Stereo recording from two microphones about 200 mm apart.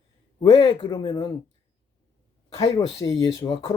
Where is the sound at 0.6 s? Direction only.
20° left (ahead or behind).